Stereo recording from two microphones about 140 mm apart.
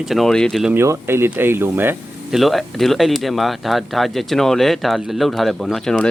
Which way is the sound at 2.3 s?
Centre (ahead or behind).